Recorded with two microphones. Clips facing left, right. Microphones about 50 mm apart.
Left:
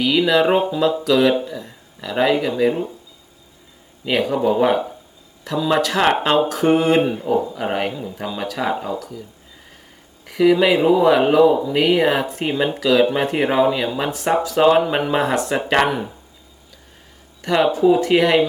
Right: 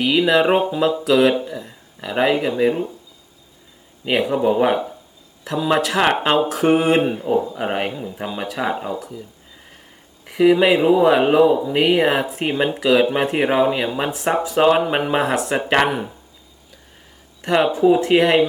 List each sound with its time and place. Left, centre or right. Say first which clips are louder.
0.0 s speech: even; centre
4.0 s speech: even; centre
10.2 s speech: right 1 dB; centre
17.4 s speech: even; centre